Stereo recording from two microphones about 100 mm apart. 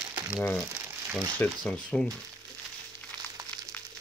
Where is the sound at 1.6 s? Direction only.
10° left (ahead or behind).